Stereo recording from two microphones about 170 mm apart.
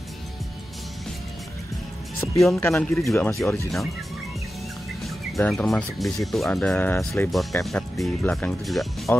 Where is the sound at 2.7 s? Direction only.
5° left (ahead or behind).